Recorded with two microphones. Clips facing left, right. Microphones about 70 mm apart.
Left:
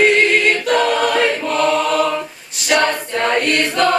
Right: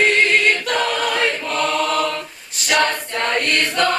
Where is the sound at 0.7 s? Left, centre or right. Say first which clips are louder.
Left 5 dB; centre.